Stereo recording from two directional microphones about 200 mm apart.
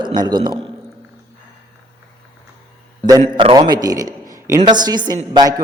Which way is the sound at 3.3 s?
25° right (ahead or behind).